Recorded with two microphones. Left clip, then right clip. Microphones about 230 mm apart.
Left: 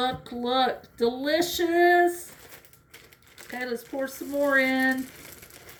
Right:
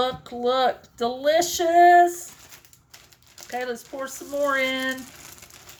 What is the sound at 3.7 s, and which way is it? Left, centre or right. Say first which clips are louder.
Speech: even; right.